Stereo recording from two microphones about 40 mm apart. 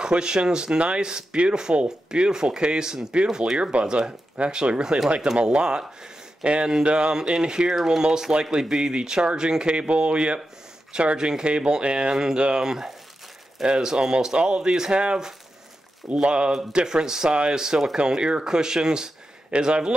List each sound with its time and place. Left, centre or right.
0.0 s speech: right